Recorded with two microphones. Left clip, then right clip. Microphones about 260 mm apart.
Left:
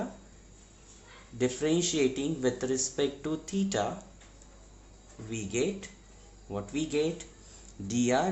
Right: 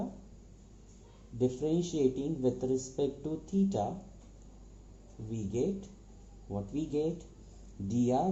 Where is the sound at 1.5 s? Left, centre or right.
Left.